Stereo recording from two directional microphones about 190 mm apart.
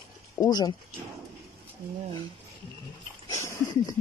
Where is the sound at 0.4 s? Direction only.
20° left (ahead or behind).